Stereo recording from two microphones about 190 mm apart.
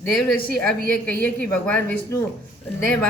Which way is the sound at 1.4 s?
5° left (ahead or behind).